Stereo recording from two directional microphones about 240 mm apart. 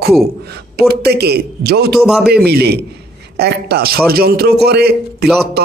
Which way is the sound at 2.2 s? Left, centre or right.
Right.